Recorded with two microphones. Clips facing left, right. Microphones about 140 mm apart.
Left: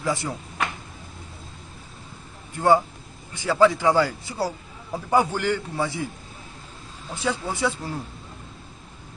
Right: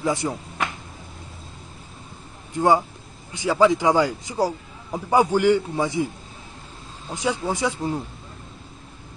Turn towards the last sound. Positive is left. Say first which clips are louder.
# right 2 dB
turn(degrees=-15)  # may be behind; listen again after turning